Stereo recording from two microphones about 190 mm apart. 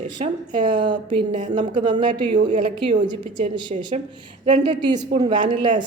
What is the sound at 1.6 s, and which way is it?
A woman's voice, 25° right (ahead or behind).